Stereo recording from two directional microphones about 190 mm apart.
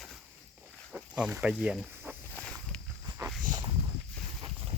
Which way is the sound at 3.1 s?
15° right (ahead or behind).